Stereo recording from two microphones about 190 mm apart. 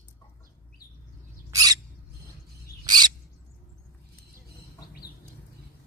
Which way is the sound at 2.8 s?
20° right (ahead or behind).